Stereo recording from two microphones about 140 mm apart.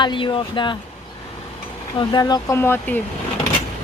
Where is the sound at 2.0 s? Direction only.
30° left (ahead or behind).